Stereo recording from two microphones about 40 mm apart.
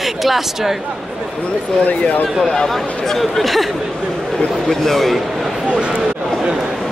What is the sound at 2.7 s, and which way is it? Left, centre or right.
A man's voice, centre.